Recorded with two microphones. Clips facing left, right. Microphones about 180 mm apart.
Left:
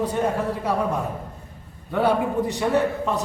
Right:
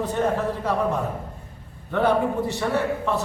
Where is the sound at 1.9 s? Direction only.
10° left (ahead or behind).